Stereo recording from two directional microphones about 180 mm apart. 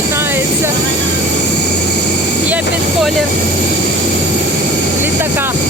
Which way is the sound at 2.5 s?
5° right (ahead or behind).